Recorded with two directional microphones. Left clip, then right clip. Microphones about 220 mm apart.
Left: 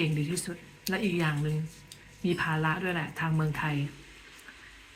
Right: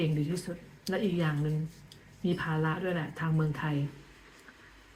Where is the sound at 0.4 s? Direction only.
15° left (ahead or behind).